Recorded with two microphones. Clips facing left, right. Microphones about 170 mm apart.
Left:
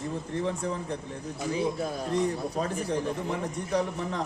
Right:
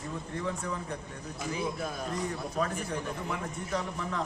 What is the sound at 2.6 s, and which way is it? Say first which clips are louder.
A man's voice: even; 30° left (ahead or behind).